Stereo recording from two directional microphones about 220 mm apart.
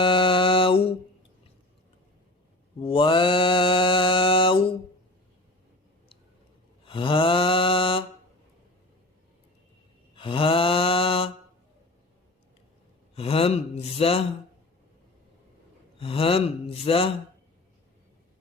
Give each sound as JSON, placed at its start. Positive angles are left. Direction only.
{"t": 0.0, "sound": "mantra", "side_deg": 25}
{"t": 2.8, "sound": "mantra", "side_deg": 25}
{"t": 6.8, "sound": "mantra", "side_deg": 20}
{"t": 10.2, "sound": "mantra", "side_deg": 25}
{"t": 13.1, "sound": "gasp", "side_deg": 25}
{"t": 16.0, "sound": "speech", "side_deg": 25}